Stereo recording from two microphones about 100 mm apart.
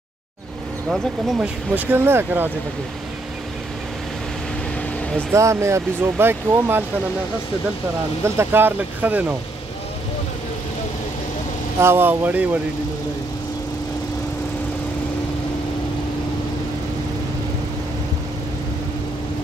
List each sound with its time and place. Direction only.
0.8 s speech: centre (ahead or behind)
1.8 s speech: 20° right (ahead or behind)
5.3 s speech: 30° right (ahead or behind)
8.4 s speech: 20° right (ahead or behind)
11.8 s speech: 20° right (ahead or behind)